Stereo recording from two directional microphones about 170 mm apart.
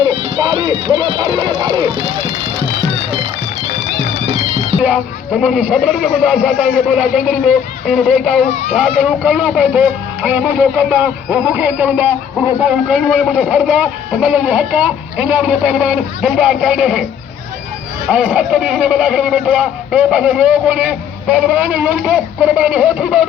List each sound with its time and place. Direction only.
0.2 s speech: 30° right (ahead or behind)
4.8 s a man's voice: 5° right (ahead or behind)
18.1 s speech: 5° right (ahead or behind)